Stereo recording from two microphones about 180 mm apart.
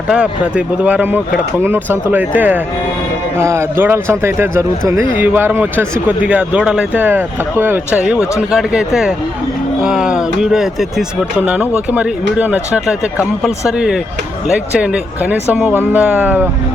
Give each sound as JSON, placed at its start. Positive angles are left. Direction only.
{"t": 0.1, "sound": "speech", "side_deg": -5}